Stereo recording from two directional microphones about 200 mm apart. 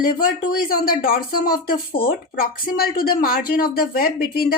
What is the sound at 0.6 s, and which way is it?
Speech, 45° left (ahead or behind).